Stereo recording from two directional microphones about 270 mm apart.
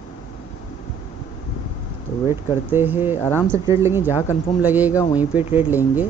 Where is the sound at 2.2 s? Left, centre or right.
Centre.